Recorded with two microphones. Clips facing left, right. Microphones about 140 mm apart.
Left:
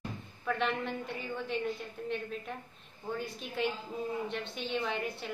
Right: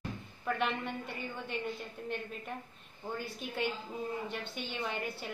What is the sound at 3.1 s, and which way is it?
Speech, centre (ahead or behind).